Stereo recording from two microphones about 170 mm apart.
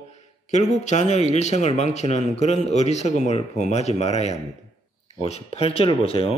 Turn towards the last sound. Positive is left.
turn(degrees=35)  # may be behind; listen again after turning